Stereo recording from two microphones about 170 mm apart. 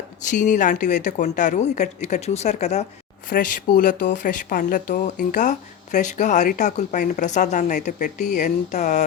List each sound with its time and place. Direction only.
0.2 s speech: 45° left (ahead or behind)
3.2 s speech: 55° left (ahead or behind)